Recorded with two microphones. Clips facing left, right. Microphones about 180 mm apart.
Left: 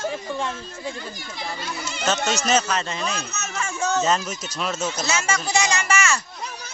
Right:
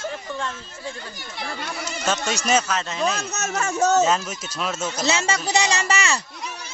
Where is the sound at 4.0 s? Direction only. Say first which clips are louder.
Right 2 dB; 5° right (ahead or behind).